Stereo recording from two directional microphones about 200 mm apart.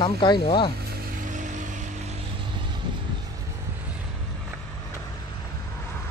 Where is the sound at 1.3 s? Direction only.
40° right (ahead or behind).